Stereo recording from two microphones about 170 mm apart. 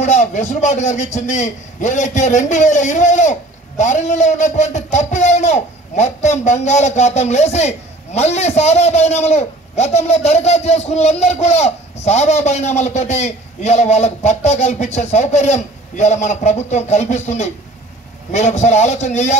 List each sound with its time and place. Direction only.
0.0 s a man's voice: 45° left (ahead or behind)